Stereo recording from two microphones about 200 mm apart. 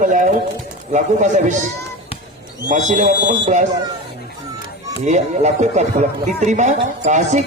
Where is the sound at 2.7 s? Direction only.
40° right (ahead or behind).